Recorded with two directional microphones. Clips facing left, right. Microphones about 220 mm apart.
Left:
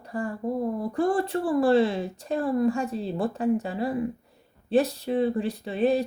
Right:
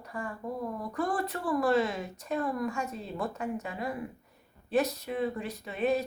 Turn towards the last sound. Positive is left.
turn(degrees=30)  # may be behind; listen again after turning